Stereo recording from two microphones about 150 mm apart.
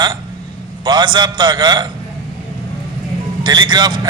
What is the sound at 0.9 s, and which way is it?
Speech, 30° right (ahead or behind).